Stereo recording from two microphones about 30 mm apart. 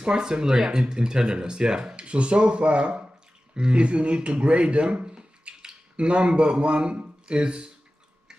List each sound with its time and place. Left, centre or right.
0.0 s speech: right
2.0 s a man's voice: right